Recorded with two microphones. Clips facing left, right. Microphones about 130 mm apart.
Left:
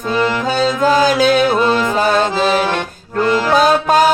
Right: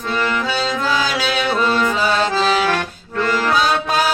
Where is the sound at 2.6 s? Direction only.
20° left (ahead or behind).